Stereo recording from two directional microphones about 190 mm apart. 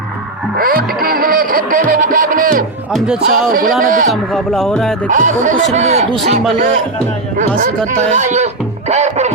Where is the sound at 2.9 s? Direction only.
5° right (ahead or behind).